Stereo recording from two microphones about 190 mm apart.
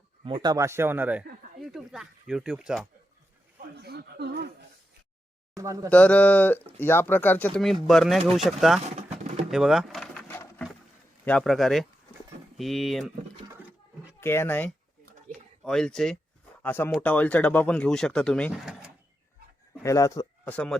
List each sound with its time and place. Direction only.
0.3 s a man's voice: 25° right (ahead or behind); by 2.8 s 5° right (ahead or behind)
3.8 s snicker: 55° right (ahead or behind)
5.5 s a man's voice: 15° right (ahead or behind)
5.9 s speech: 5° left (ahead or behind)
9.0 s pigeon: 40° right (ahead or behind)
9.5 s vehicle: centre (ahead or behind)
11.3 s speech: 5° left (ahead or behind)
14.2 s speech: 15° left (ahead or behind)
15.3 s a sound: centre (ahead or behind)
16.6 s speech: 10° left (ahead or behind)
19.8 s speech: 15° left (ahead or behind)